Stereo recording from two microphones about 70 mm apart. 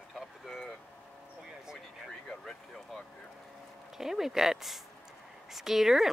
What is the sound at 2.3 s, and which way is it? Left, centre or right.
Vehicle, centre.